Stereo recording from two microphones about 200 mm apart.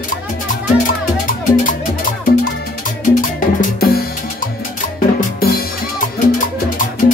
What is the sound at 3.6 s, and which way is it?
Music, 45° left (ahead or behind).